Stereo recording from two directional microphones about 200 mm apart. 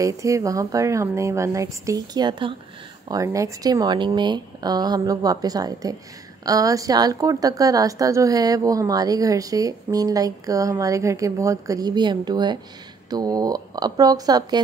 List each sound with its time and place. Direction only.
0.0 s a woman's voice: 15° right (ahead or behind)